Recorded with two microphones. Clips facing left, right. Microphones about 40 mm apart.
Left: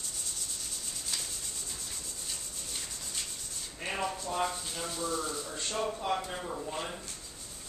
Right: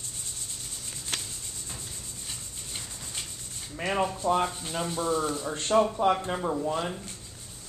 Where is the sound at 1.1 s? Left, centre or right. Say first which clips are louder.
Right 5 dB; right.